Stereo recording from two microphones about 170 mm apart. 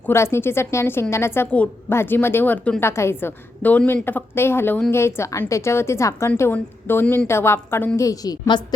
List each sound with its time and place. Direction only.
0.0 s a woman's voice: 15° left (ahead or behind)